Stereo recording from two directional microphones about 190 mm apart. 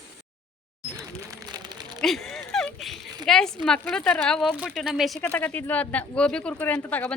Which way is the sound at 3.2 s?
Centre (ahead or behind).